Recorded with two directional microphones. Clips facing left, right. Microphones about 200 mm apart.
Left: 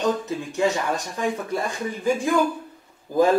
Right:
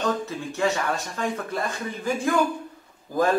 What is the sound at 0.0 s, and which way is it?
Speech, 15° left (ahead or behind).